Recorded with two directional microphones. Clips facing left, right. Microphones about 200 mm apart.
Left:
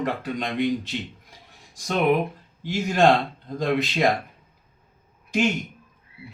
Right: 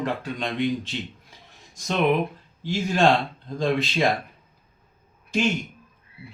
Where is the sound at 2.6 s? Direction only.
15° left (ahead or behind).